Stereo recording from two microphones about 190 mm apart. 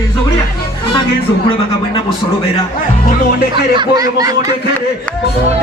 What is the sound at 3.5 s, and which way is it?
Speech, 25° right (ahead or behind).